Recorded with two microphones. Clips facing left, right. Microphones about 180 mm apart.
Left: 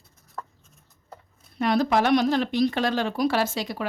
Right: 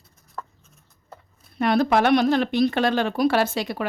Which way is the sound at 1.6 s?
60° right (ahead or behind).